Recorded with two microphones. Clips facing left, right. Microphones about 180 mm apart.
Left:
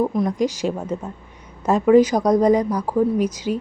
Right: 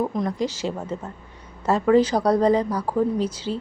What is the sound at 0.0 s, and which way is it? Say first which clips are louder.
A woman's voice: left 4 dB; 10° left (ahead or behind).